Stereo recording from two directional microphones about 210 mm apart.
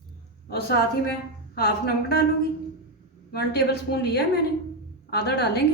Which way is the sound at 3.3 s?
50° left (ahead or behind).